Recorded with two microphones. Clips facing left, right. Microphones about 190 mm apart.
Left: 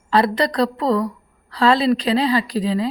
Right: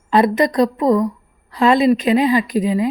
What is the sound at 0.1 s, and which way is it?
A woman's voice, 20° right (ahead or behind).